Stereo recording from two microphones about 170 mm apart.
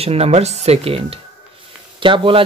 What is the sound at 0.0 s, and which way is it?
Speech, 35° right (ahead or behind).